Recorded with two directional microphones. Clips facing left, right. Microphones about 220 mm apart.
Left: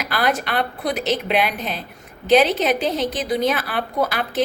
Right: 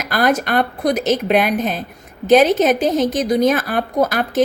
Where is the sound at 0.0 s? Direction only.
45° right (ahead or behind).